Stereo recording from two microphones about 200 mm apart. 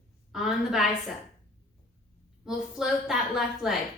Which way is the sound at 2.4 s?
5° right (ahead or behind).